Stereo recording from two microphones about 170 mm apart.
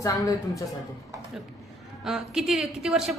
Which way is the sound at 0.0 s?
20° left (ahead or behind).